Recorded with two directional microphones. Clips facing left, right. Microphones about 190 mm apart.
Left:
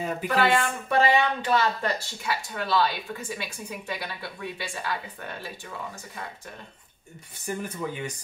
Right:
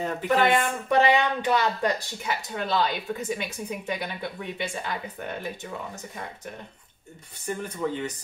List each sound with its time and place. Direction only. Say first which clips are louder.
0.3 s a woman's voice: right 2 dB; 20° right (ahead or behind)
7.4 s speech: right 2 dB; 10° left (ahead or behind)